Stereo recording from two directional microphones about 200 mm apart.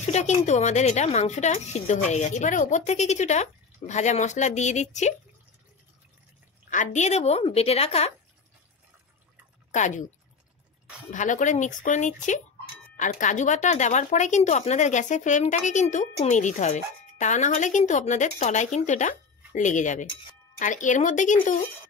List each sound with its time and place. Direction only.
0.0 s speech: 35° left (ahead or behind)
6.7 s speech: 40° left (ahead or behind)
9.7 s speech: 35° left (ahead or behind)
11.1 s speech: 40° left (ahead or behind)